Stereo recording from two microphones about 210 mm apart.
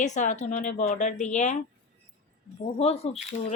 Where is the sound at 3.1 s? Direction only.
30° left (ahead or behind).